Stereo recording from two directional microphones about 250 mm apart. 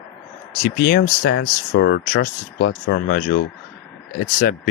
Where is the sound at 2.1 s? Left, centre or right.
Left.